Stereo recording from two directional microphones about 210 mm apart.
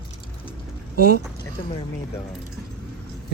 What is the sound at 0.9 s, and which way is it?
Speech, 45° right (ahead or behind).